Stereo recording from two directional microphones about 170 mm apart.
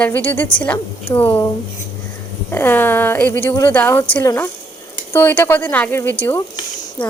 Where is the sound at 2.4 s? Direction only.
10° left (ahead or behind).